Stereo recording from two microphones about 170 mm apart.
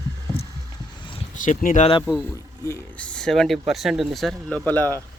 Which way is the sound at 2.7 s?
10° left (ahead or behind).